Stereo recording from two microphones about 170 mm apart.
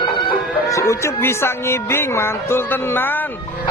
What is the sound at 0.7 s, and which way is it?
Speech, 15° left (ahead or behind).